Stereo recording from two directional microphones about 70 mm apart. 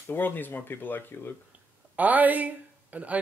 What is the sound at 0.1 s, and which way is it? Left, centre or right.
Speech, left.